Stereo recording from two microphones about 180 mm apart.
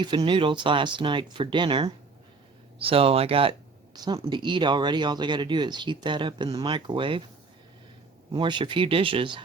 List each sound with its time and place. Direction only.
0.0 s speech: 25° right (ahead or behind)
8.3 s speech: 25° right (ahead or behind)